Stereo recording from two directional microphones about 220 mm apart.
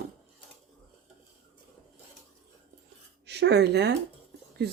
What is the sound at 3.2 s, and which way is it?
Speech, 50° right (ahead or behind).